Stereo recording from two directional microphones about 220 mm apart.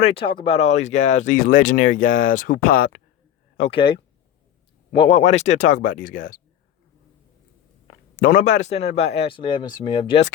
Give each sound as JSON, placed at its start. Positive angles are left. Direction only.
{"t": 0.0, "sound": "speech", "side_deg": 25}
{"t": 3.6, "sound": "speech", "side_deg": 25}
{"t": 8.1, "sound": "speech", "side_deg": 40}